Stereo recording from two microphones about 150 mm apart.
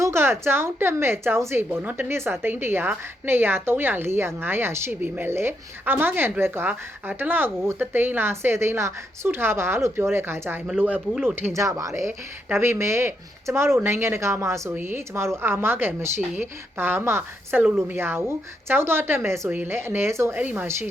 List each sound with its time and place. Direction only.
0.0 s speech: 15° right (ahead or behind)